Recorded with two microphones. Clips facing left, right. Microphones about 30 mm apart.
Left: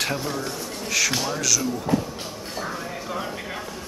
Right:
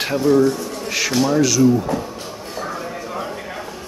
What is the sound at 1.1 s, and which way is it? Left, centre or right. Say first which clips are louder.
Speech: right 9 dB; centre.